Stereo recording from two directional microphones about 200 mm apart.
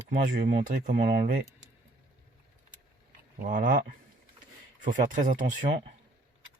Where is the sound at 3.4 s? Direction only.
40° right (ahead or behind).